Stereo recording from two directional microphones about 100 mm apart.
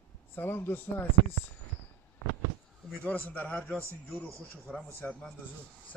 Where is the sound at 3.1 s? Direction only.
15° left (ahead or behind).